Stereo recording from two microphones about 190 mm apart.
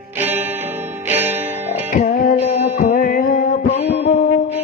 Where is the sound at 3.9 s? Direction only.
65° left (ahead or behind).